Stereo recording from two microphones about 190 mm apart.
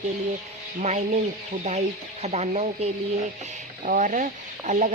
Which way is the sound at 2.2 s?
35° right (ahead or behind).